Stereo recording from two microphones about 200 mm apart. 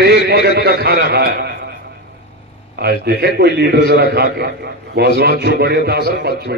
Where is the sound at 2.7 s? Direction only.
55° right (ahead or behind).